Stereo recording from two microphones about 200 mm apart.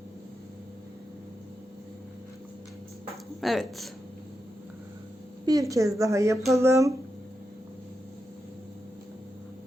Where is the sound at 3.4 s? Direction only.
Centre (ahead or behind).